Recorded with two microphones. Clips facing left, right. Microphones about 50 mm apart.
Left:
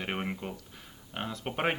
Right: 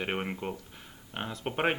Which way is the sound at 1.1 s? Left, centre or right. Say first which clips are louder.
Right 1 dB; centre.